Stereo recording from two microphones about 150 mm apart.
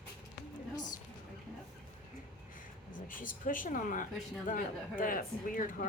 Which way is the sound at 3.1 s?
65° left (ahead or behind).